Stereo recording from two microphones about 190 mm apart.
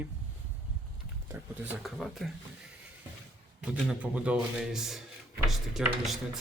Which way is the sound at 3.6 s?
5° right (ahead or behind).